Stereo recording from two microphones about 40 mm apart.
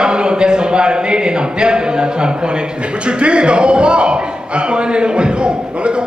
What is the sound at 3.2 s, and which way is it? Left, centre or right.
A man's voice, right.